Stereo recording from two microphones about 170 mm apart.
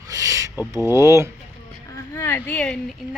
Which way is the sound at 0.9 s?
15° right (ahead or behind).